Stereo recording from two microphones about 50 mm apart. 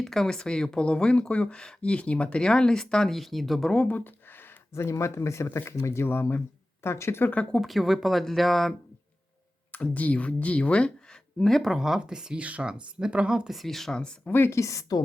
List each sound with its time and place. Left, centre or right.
0.0 s speech: centre
3.8 s a sound: left
4.7 s speech: left
6.1 s speech: left
6.8 s speech: left
7.6 s speech: centre
9.7 s speech: left
11.6 s speech: centre
12.4 s a woman's voice: right
13.5 s speech: centre
13.9 s speech: centre
14.3 s speech: left
14.5 s a woman's voice: left